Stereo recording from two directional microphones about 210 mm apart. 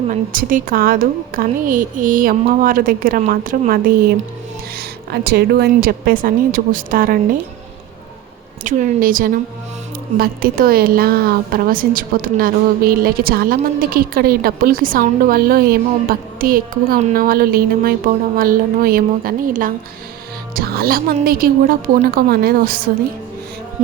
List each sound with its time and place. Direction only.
0.1 s a woman's voice: 40° right (ahead or behind)
8.6 s a woman's voice: 40° right (ahead or behind)